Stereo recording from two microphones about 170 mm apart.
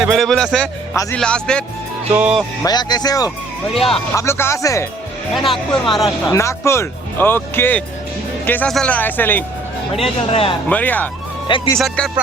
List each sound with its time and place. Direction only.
0.0 s speech: centre (ahead or behind)
2.1 s speech: 5° right (ahead or behind)
2.6 s speech: 25° left (ahead or behind)
3.7 s speech: centre (ahead or behind)
4.1 s speech: 15° left (ahead or behind)
5.3 s speech: centre (ahead or behind)
6.3 s speech: 15° left (ahead or behind)
9.9 s speech: 35° left (ahead or behind)
10.7 s speech: 10° left (ahead or behind)
11.4 s speech: 30° left (ahead or behind)
11.8 s speech: centre (ahead or behind)